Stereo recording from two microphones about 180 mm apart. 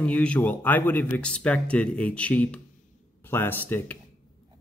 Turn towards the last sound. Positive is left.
turn(degrees=10)  # may be behind; listen again after turning